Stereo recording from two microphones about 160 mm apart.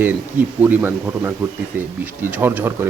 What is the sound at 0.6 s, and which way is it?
Speech, 10° right (ahead or behind).